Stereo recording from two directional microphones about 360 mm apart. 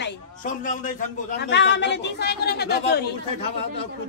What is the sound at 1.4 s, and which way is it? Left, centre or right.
A woman's voice, left.